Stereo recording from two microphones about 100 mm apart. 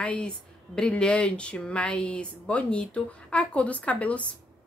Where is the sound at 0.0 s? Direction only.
10° left (ahead or behind).